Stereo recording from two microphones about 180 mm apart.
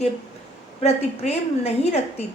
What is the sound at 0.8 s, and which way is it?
A woman's voice, 35° left (ahead or behind).